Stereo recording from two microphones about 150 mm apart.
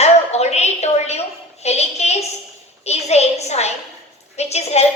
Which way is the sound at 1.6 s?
45° left (ahead or behind).